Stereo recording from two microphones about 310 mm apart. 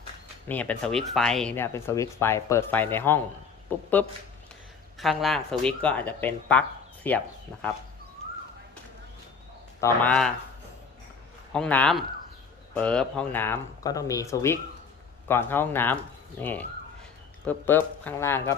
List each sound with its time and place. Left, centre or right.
0.4 s speech: centre
4.9 s speech: centre
9.8 s speech: centre
11.5 s speech: centre